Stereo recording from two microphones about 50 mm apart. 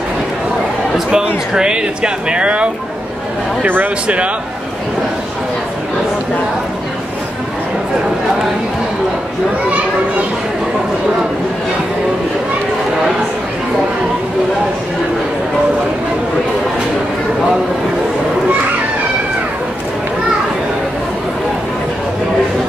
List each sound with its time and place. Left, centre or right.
0.9 s speech: centre
3.6 s speech: right